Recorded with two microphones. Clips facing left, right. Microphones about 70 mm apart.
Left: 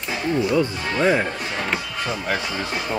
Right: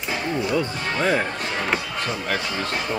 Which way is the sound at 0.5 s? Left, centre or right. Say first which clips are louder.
Left 3 dB; centre.